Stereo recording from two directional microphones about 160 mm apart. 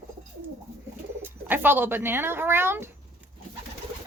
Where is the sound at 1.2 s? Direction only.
10° right (ahead or behind).